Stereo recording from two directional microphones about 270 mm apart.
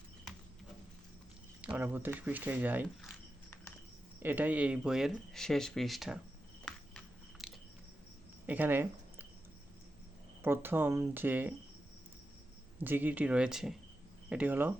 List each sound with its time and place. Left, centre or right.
1.6 s speech: centre
4.2 s speech: centre
6.7 s a sound: centre
8.4 s speech: centre
10.4 s speech: centre
12.8 s speech: centre